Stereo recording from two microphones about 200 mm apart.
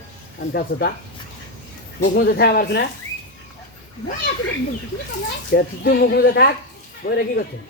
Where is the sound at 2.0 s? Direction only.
55° left (ahead or behind).